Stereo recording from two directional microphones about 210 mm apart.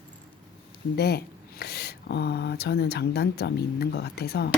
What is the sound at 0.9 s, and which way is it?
Speech, 50° left (ahead or behind).